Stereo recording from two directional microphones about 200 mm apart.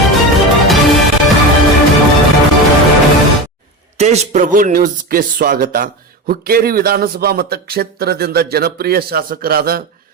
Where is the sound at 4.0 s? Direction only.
35° right (ahead or behind).